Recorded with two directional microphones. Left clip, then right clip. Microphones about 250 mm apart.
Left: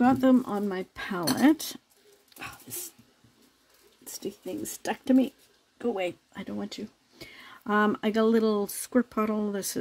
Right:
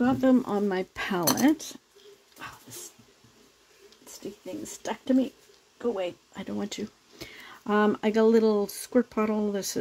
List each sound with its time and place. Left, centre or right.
0.0 s speech: centre
0.3 s speech: centre
1.4 s speech: centre
4.6 s speech: left
5.8 s speech: centre
6.3 s speech: centre